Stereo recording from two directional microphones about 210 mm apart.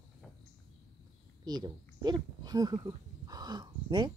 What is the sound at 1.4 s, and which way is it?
Speech, 20° right (ahead or behind).